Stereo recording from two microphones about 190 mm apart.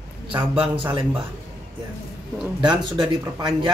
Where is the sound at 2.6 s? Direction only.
25° right (ahead or behind).